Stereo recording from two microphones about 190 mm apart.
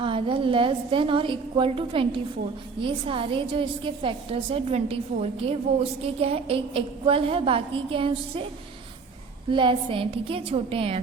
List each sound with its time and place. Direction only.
0.0 s a woman's voice: 25° right (ahead or behind)
9.5 s a woman's voice: 25° right (ahead or behind)